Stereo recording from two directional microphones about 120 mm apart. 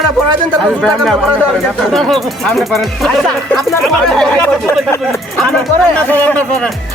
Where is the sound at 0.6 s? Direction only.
5° left (ahead or behind).